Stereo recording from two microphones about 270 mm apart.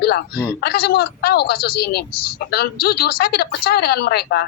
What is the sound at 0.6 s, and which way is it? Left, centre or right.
A man's voice, left.